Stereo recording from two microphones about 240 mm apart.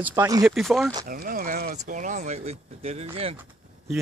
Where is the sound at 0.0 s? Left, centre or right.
Centre.